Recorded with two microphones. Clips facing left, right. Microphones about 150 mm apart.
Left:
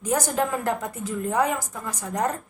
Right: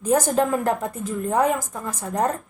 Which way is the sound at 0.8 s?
45° right (ahead or behind).